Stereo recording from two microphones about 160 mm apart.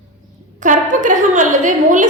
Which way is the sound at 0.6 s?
50° right (ahead or behind).